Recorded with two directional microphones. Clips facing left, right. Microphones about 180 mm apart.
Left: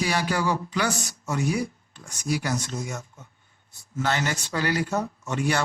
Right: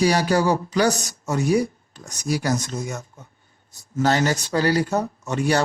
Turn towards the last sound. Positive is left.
turn(degrees=-40)  # may be behind; listen again after turning